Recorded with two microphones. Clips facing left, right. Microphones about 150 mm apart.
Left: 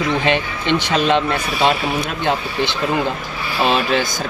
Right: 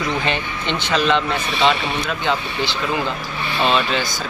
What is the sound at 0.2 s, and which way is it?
A man's voice, 5° left (ahead or behind).